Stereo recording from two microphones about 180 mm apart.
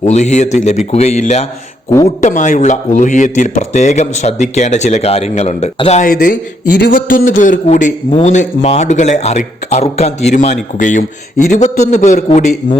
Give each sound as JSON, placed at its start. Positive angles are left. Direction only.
{"t": 0.0, "sound": "speech", "side_deg": 40}
{"t": 6.1, "sound": "a man's voice", "side_deg": 50}